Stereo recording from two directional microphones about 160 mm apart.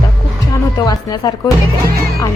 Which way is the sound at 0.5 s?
25° left (ahead or behind).